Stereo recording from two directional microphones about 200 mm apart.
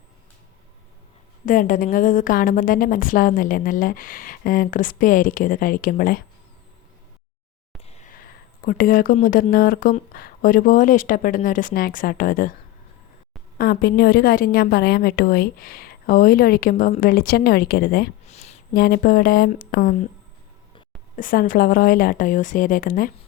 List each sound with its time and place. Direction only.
1.5 s a woman's voice: 40° left (ahead or behind)
7.9 s speech: 35° left (ahead or behind)
13.6 s a woman's voice: 50° left (ahead or behind)
18.3 s a sound: 35° left (ahead or behind)
18.7 s a woman's voice: 50° left (ahead or behind)
21.2 s a woman's voice: 45° left (ahead or behind)